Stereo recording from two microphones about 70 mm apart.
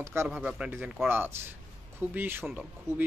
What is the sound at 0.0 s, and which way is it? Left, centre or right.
Speech, right.